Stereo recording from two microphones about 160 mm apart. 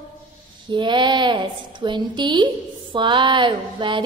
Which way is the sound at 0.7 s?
30° right (ahead or behind).